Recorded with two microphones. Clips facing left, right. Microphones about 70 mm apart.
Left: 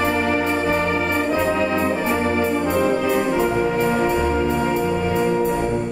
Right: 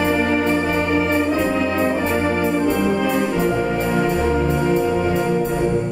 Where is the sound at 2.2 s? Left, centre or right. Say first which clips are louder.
Right 1 dB; right.